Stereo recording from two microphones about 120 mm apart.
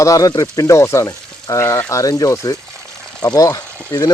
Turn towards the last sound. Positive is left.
turn(degrees=25)  # may be behind; listen again after turning